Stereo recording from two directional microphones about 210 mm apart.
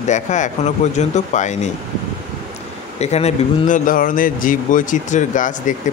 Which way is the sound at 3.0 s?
30° left (ahead or behind).